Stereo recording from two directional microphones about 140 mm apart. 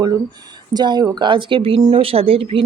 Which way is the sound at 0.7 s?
30° right (ahead or behind).